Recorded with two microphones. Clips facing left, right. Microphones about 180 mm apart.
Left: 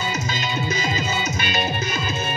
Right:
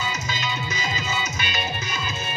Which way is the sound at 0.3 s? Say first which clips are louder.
Left 4 dB; 50° left (ahead or behind).